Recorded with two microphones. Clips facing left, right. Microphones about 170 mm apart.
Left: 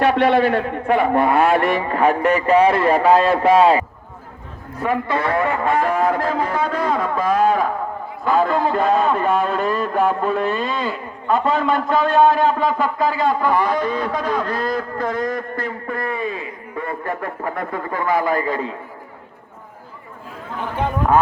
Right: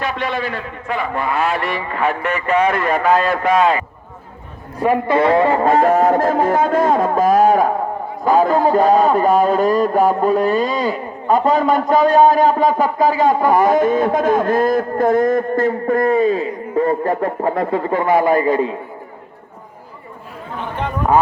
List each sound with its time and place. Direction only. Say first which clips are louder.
0.0 s a man's voice: left 7 dB; 65° left (ahead or behind); by 3.8 s 30° left (ahead or behind)
4.9 s a man's voice: right 6 dB; 20° right (ahead or behind)